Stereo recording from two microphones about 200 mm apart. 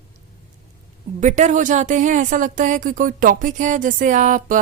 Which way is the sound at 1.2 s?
40° right (ahead or behind).